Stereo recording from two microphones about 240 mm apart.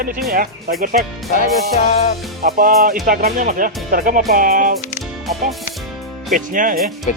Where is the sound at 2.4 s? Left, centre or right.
Right.